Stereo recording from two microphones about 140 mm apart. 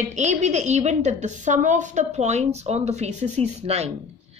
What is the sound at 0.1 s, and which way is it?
A woman's voice, 55° right (ahead or behind).